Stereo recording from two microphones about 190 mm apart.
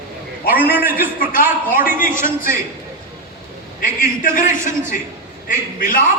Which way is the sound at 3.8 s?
45° left (ahead or behind).